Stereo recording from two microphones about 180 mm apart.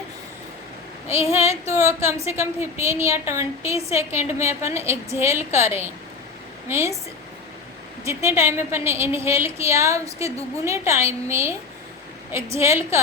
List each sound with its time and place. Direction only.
1.3 s a woman's voice: 15° right (ahead or behind)
8.0 s a woman's voice: 15° right (ahead or behind)